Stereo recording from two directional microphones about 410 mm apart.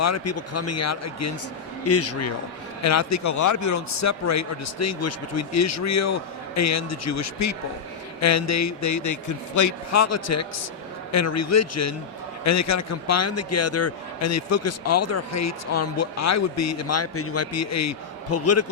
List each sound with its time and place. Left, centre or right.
0.0 s a man's voice: left